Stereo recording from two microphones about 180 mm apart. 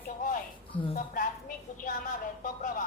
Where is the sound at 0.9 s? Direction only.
50° left (ahead or behind).